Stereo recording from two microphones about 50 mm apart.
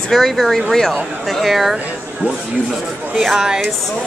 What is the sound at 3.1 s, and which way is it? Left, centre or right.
Speech, centre.